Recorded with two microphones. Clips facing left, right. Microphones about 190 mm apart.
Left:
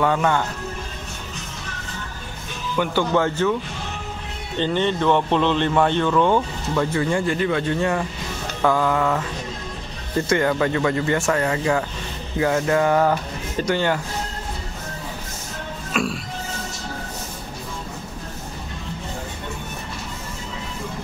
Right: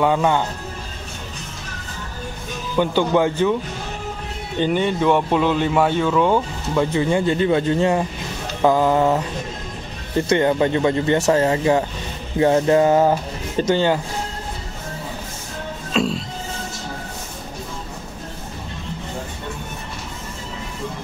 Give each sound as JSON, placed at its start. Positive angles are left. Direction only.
{"t": 0.0, "sound": "speech", "side_deg": -15}
{"t": 2.7, "sound": "speech", "side_deg": -20}
{"t": 4.6, "sound": "speech", "side_deg": -10}
{"t": 10.3, "sound": "speech", "side_deg": -25}
{"t": 15.9, "sound": "music", "side_deg": -25}